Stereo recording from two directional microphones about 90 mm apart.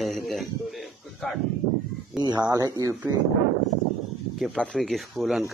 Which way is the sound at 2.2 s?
50° right (ahead or behind).